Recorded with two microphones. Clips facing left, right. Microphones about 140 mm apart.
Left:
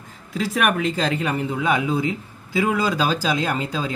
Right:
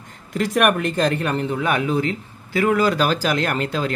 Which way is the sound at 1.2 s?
10° left (ahead or behind).